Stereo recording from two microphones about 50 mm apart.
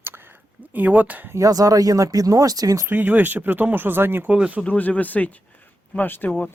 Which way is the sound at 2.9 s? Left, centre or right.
Right.